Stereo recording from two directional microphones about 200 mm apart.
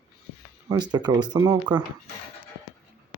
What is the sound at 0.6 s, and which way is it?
Speech, 20° right (ahead or behind).